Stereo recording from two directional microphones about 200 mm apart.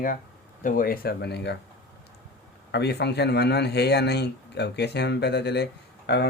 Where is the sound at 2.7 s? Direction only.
55° left (ahead or behind).